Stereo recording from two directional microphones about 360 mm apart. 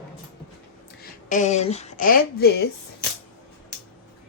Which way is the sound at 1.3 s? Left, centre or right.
Centre.